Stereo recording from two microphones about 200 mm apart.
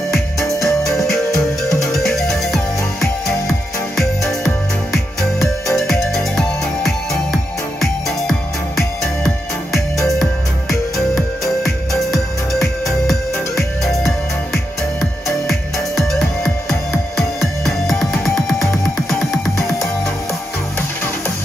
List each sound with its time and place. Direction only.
0.6 s music: centre (ahead or behind)
3.9 s music: centre (ahead or behind)
5.8 s music: centre (ahead or behind)